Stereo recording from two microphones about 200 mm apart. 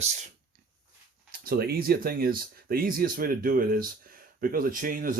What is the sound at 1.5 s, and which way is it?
Speech, 50° right (ahead or behind).